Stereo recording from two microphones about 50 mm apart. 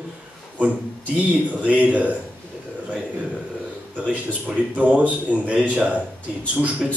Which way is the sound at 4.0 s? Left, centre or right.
Right.